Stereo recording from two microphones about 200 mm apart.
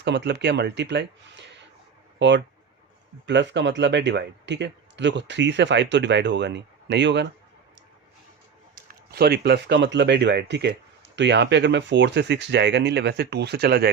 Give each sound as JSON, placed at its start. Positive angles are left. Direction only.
{"t": 0.0, "sound": "speech", "side_deg": -60}
{"t": 8.7, "sound": "speech", "side_deg": -50}